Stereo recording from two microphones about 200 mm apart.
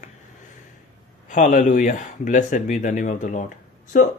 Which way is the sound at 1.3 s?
40° left (ahead or behind).